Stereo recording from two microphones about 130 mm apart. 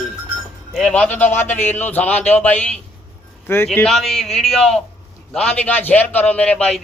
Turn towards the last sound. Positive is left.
turn(degrees=5)  # may be behind; listen again after turning